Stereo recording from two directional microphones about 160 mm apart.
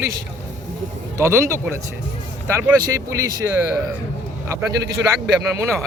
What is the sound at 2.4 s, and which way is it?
Speech, 15° right (ahead or behind).